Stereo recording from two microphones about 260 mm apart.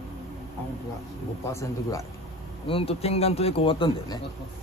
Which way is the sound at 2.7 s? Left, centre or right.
Left.